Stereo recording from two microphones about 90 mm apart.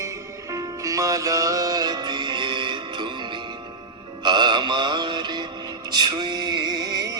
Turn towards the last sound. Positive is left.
turn(degrees=-50)  # may be behind; listen again after turning